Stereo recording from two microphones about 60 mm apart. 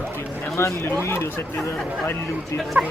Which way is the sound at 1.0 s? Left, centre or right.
Left.